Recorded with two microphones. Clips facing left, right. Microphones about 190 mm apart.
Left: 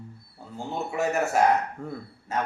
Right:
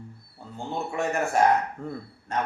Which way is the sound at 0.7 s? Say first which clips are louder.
Left 1 dB; 5° left (ahead or behind).